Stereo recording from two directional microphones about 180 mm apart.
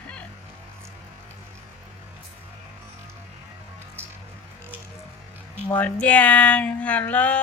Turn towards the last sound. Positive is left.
turn(degrees=5)  # may be behind; listen again after turning